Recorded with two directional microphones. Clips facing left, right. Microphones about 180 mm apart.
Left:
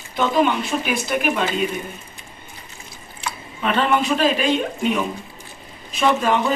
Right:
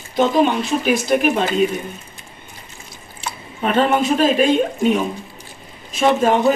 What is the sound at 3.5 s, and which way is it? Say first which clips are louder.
Speech: right 3 dB; 40° right (ahead or behind).